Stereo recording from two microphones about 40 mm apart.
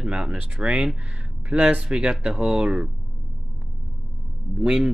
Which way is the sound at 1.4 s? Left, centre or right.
Right.